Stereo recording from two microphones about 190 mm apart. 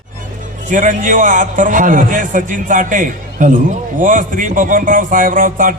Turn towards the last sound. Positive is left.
turn(degrees=-45)  # may be behind; listen again after turning